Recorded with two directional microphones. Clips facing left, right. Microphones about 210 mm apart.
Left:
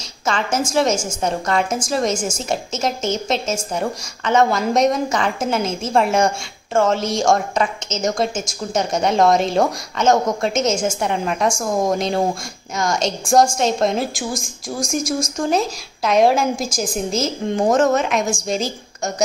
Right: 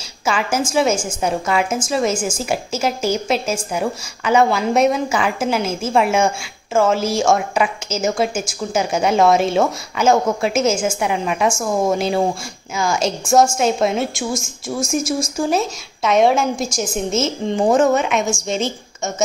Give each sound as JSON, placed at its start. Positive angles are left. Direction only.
{"t": 0.3, "sound": "a woman's voice", "side_deg": -5}
{"t": 18.3, "sound": "a woman's voice", "side_deg": 35}